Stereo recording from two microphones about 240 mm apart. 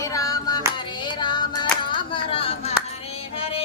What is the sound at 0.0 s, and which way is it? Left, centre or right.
Hands, centre.